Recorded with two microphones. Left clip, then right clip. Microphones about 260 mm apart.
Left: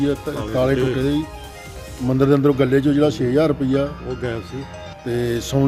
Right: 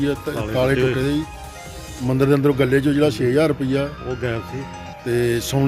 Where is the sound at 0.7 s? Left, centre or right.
Centre.